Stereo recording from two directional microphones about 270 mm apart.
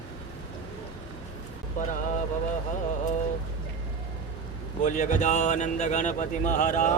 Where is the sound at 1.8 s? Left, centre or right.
Left.